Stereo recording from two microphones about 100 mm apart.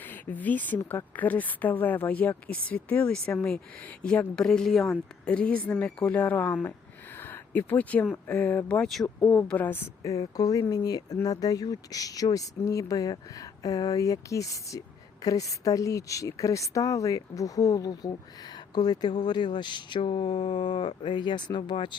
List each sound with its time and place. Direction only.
0.0 s speech: 15° left (ahead or behind)
7.2 s a sound: 20° left (ahead or behind)
8.1 s speech: 15° left (ahead or behind)
10.0 s speech: 35° left (ahead or behind); by 21.9 s 50° left (ahead or behind)